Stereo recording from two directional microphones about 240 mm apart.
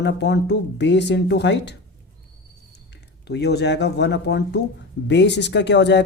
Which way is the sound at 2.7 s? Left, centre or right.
Left.